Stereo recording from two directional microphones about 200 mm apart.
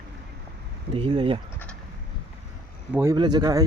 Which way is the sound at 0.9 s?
25° right (ahead or behind).